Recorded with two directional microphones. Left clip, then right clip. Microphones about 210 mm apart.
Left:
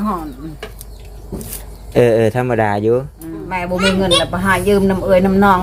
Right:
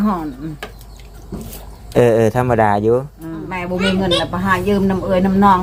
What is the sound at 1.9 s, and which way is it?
Speech, 5° left (ahead or behind).